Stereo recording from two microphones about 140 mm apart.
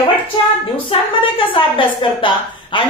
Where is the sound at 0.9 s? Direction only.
40° left (ahead or behind).